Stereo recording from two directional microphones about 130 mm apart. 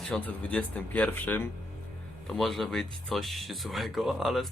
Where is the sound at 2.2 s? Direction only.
Centre (ahead or behind).